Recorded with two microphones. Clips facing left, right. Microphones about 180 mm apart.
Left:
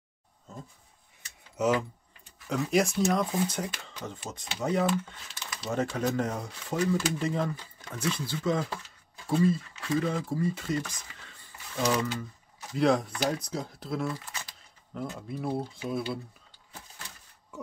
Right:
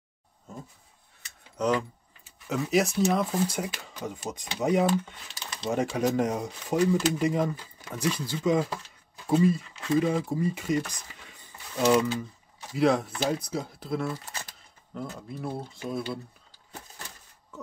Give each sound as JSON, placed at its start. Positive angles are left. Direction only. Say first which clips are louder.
{"t": 1.6, "sound": "speech", "louder": "even", "side_deg": 5}
{"t": 12.7, "sound": "speech", "louder": "right 1 dB", "side_deg": 0}